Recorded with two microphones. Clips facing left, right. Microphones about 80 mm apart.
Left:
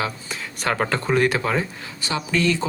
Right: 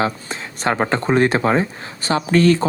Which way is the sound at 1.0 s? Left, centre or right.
Right.